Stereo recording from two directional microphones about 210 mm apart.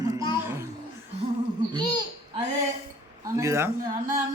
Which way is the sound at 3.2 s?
15° right (ahead or behind).